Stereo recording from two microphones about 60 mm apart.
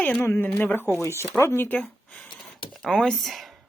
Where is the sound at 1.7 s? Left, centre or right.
Left.